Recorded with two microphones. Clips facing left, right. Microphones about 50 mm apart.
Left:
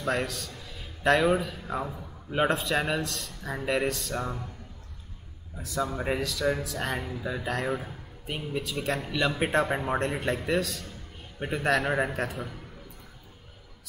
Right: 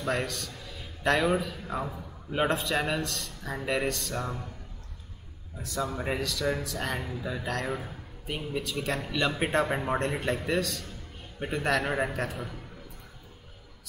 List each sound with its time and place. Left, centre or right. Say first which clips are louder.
0.0 s speech: left 1 dB; centre
5.6 s a man's voice: left 2 dB; centre
11.9 s a man's voice: left 2 dB; centre
12.2 s speech: left 1 dB; centre